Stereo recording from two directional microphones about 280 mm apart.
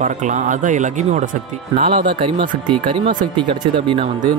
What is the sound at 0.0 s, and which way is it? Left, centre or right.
Speech, right.